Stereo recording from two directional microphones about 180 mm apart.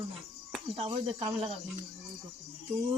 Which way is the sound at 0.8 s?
30° right (ahead or behind).